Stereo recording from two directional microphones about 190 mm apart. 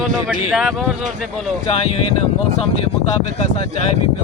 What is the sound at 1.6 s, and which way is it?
Speech, 30° left (ahead or behind).